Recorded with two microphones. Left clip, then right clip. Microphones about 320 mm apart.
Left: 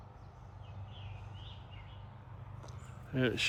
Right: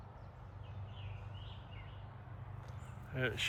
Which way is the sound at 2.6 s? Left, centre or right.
Centre.